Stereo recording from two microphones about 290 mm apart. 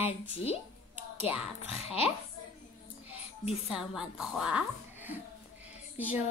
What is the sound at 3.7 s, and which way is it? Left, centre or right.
Speech, centre.